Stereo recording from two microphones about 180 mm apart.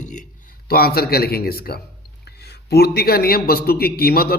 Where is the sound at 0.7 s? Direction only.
60° left (ahead or behind).